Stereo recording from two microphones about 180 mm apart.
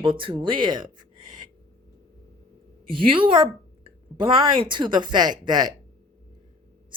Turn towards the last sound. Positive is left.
turn(degrees=-25)  # may be behind; listen again after turning